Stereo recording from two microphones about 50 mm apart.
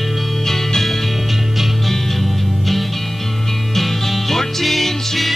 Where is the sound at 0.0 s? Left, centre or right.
Centre.